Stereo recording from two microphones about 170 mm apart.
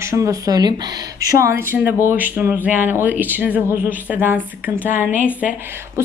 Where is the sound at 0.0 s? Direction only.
15° right (ahead or behind).